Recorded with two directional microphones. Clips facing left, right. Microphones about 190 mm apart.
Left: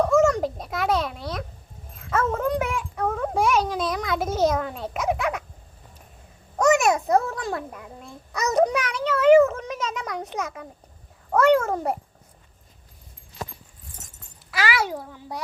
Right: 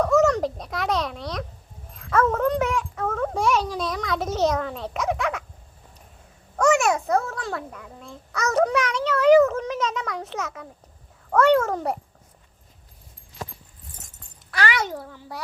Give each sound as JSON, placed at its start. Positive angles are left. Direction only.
{"t": 0.0, "sound": "a sound", "side_deg": 10}
{"t": 2.0, "sound": "a child's voice", "side_deg": 5}
{"t": 6.7, "sound": "a child's voice", "side_deg": 15}
{"t": 14.5, "sound": "a child's voice", "side_deg": 5}